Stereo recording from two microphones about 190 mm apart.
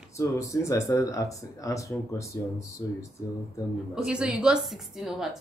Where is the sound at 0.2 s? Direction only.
15° left (ahead or behind).